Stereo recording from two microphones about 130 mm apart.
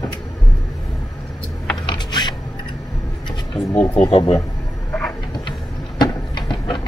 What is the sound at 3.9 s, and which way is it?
Speech, 40° left (ahead or behind).